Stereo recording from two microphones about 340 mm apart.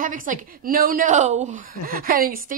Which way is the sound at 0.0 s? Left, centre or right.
Right.